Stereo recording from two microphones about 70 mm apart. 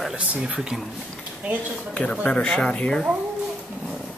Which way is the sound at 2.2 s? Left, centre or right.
Centre.